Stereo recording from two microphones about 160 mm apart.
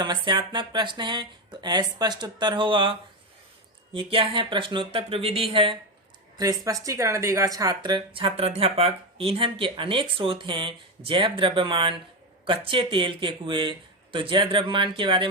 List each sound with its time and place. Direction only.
0.0 s speech: 25° right (ahead or behind)
3.9 s speech: 35° right (ahead or behind)
6.3 s speech: 20° right (ahead or behind)